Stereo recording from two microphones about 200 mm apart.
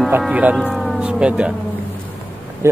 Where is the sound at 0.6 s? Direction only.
Centre (ahead or behind).